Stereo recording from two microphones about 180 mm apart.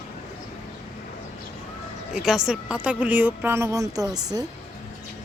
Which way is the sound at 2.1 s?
5° right (ahead or behind).